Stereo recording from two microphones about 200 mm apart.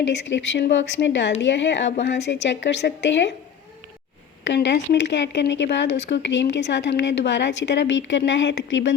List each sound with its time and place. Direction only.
0.0 s speech: 65° left (ahead or behind)
4.4 s speech: 60° left (ahead or behind)